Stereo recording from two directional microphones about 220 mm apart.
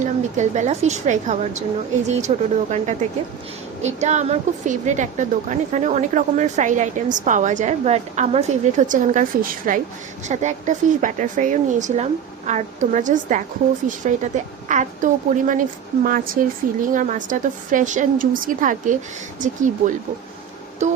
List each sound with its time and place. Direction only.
0.0 s a woman's voice: 30° right (ahead or behind)